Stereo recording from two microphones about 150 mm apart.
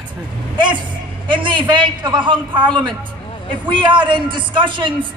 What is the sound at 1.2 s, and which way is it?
A man's voice, 35° right (ahead or behind).